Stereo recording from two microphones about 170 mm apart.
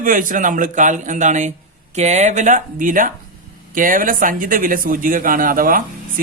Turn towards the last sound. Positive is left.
turn(degrees=-55)  # may be behind; listen again after turning